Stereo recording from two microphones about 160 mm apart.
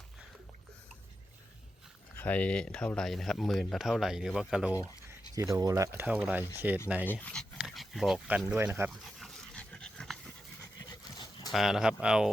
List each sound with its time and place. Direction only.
2.1 s speech: 10° left (ahead or behind)
5.3 s speech: 20° right (ahead or behind)
7.0 s speech: 10° left (ahead or behind); by 8.9 s 10° right (ahead or behind)
8.9 s dog: centre (ahead or behind)
10.8 s dog: 25° left (ahead or behind)
11.5 s speech: 5° right (ahead or behind)